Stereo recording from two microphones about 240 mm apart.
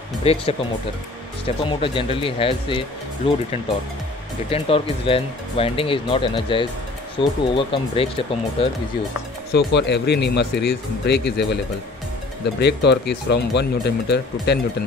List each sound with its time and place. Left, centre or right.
0.2 s speech: left
1.6 s speech: left
4.5 s speech: left
9.5 s speech: left